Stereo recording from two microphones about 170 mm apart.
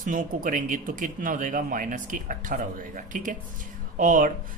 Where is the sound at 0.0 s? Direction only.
50° right (ahead or behind).